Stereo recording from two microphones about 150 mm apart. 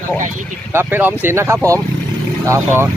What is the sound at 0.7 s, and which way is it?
Speech, 15° right (ahead or behind).